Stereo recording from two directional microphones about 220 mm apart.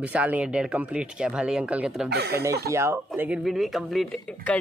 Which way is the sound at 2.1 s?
45° right (ahead or behind).